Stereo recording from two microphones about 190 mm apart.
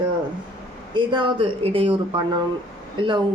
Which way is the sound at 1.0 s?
25° right (ahead or behind).